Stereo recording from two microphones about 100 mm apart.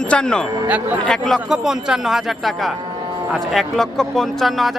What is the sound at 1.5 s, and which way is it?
Speech, 5° right (ahead or behind).